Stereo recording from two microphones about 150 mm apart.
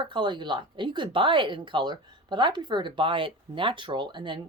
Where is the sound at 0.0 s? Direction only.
30° right (ahead or behind).